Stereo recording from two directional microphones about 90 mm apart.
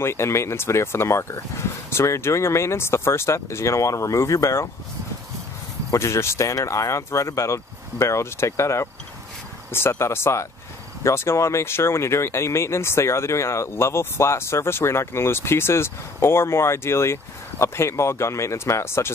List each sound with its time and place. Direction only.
0.0 s speech: 30° left (ahead or behind)
5.9 s speech: 30° left (ahead or behind)